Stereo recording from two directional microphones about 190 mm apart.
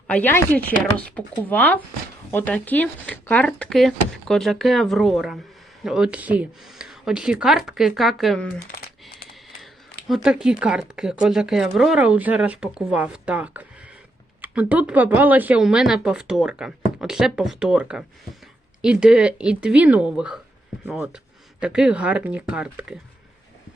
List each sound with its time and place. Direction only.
0.1 s speech: 10° left (ahead or behind)
10.2 s speech: 5° right (ahead or behind)